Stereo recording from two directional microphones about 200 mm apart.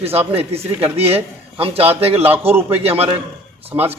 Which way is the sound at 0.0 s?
30° right (ahead or behind).